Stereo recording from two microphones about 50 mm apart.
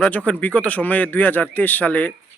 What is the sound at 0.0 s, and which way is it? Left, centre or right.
A man's voice, left.